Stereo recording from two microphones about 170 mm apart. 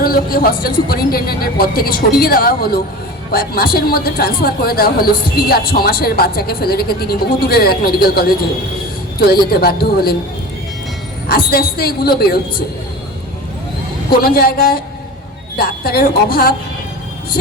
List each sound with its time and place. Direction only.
0.0 s a woman's voice: 60° left (ahead or behind)
11.3 s speech: 65° left (ahead or behind)
14.2 s speech: 65° left (ahead or behind)